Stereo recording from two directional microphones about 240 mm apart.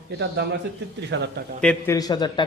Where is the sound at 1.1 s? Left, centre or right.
Right.